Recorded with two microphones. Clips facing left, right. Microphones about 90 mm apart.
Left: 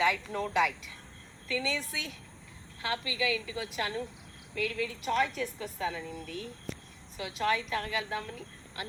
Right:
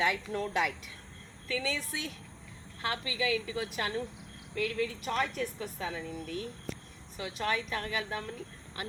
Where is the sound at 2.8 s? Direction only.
45° right (ahead or behind).